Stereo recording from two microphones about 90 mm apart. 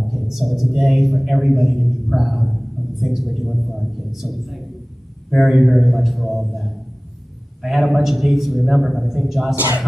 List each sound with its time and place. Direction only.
0.1 s a man's voice: centre (ahead or behind)
7.6 s a man's voice: centre (ahead or behind)